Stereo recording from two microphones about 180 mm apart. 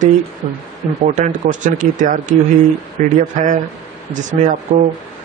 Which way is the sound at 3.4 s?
40° right (ahead or behind).